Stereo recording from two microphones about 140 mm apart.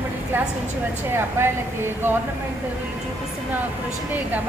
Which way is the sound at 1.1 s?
15° right (ahead or behind).